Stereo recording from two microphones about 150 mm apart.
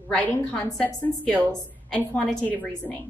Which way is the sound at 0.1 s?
5° left (ahead or behind).